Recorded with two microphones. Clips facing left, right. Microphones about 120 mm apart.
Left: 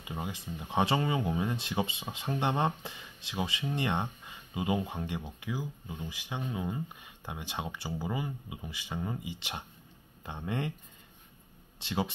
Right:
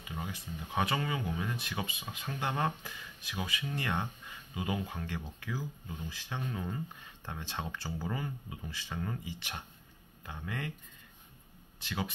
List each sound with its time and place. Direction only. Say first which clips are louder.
0.1 s speech: left 3 dB; 25° left (ahead or behind)
11.8 s speech: left 5 dB; 25° left (ahead or behind)